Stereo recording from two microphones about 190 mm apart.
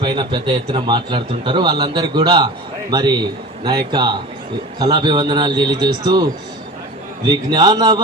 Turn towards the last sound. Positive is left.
turn(degrees=-20)  # may be behind; listen again after turning